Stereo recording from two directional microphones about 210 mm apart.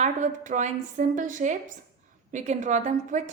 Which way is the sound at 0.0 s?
35° right (ahead or behind).